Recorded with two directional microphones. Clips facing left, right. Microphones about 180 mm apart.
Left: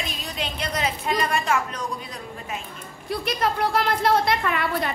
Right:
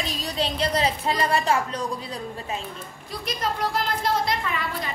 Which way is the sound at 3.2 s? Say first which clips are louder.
Left 3 dB; 60° left (ahead or behind).